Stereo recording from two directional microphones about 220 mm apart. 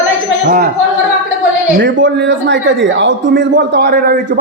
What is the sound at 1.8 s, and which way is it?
A man's voice, 55° right (ahead or behind).